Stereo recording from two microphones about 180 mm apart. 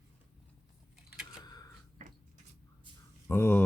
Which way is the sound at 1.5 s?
25° left (ahead or behind).